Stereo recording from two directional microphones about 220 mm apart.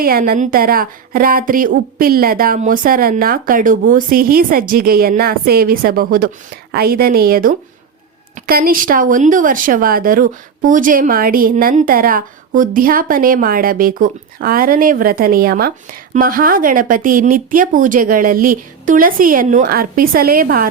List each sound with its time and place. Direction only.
0.0 s speech: 40° right (ahead or behind)